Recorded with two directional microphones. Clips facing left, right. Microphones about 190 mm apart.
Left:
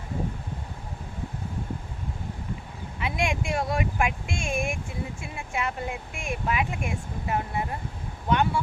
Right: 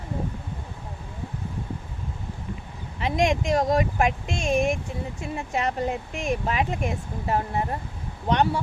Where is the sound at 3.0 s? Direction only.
35° right (ahead or behind).